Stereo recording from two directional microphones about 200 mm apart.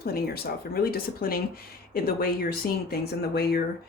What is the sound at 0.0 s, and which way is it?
Speech, 50° left (ahead or behind).